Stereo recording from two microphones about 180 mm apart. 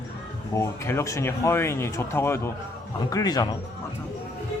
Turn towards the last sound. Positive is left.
turn(degrees=20)  # may be behind; listen again after turning